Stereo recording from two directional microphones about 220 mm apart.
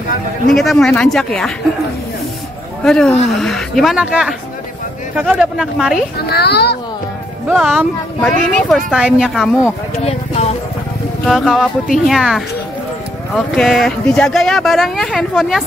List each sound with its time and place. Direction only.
0.5 s speech: centre (ahead or behind)
2.8 s speech: centre (ahead or behind)
6.2 s a child's voice: 45° left (ahead or behind)
7.4 s speech: centre (ahead or behind)
9.9 s speech: 30° left (ahead or behind)
11.2 s speech: centre (ahead or behind)
13.6 s speech: centre (ahead or behind)